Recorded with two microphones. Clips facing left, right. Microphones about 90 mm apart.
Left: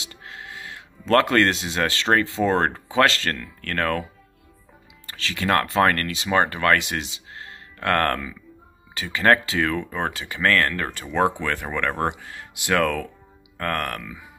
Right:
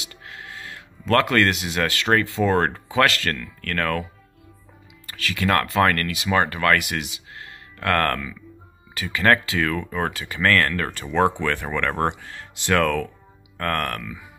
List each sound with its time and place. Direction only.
0.0 s speech: 25° left (ahead or behind)
5.0 s speech: 25° left (ahead or behind)